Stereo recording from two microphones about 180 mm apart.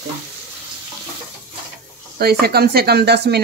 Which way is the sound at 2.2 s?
60° right (ahead or behind).